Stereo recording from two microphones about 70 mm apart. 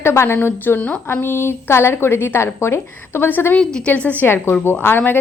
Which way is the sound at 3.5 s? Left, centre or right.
Centre.